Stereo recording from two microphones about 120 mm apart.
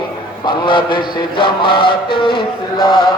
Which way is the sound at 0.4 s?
40° left (ahead or behind).